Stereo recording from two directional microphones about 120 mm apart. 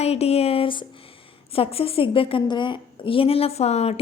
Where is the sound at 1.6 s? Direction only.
50° left (ahead or behind).